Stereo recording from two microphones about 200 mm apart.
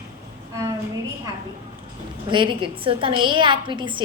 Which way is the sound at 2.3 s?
25° right (ahead or behind).